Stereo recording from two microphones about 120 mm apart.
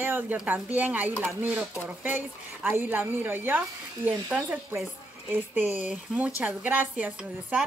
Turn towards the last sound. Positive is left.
turn(degrees=-10)  # may be behind; listen again after turning